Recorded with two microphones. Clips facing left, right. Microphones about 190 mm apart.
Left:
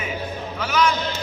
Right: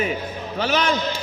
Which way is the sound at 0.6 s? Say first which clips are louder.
Right 1 dB; 30° right (ahead or behind).